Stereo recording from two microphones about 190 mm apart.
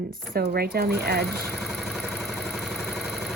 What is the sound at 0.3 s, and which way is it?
Speech, 55° right (ahead or behind).